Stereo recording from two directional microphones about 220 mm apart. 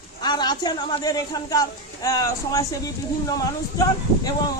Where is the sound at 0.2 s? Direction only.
20° left (ahead or behind).